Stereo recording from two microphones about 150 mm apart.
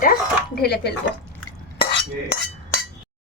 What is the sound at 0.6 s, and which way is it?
Speech, 90° left.